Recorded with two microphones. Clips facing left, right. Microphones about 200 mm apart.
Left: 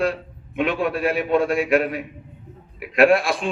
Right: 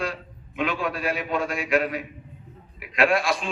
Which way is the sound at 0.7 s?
60° left (ahead or behind).